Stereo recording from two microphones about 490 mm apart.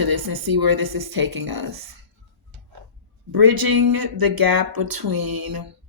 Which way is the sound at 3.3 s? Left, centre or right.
Right.